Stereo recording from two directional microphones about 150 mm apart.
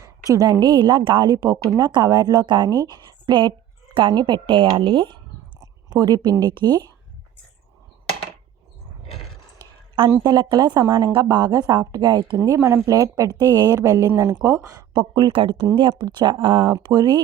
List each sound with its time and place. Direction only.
0.0 s a woman's voice: 20° right (ahead or behind)
5.5 s a sound: 25° right (ahead or behind)
6.4 s a woman's voice: 30° right (ahead or behind)
10.1 s a woman's voice: 25° right (ahead or behind)